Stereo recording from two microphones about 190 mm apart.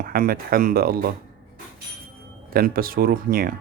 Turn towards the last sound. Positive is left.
turn(degrees=-50)  # may be behind; listen again after turning